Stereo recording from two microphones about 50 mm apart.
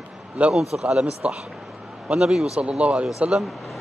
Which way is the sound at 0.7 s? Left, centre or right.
Centre.